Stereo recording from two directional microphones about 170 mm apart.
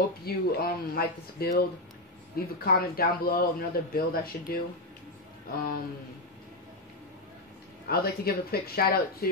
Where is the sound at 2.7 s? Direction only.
60° left (ahead or behind).